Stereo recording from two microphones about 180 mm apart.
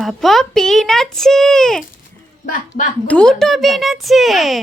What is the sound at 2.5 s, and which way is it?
Speech, 50° left (ahead or behind).